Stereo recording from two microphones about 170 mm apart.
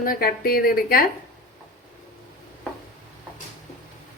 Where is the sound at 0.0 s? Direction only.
60° left (ahead or behind).